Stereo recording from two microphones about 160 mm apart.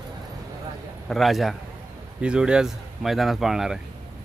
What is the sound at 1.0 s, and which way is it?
Speech, centre (ahead or behind).